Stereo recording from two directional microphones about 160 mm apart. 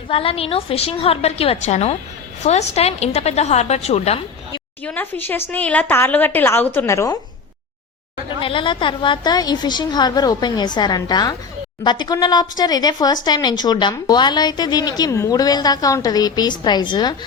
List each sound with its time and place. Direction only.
0.1 s a woman's voice: 35° left (ahead or behind)
4.8 s a woman's voice: 10° left (ahead or behind)
8.4 s a woman's voice: 30° left (ahead or behind)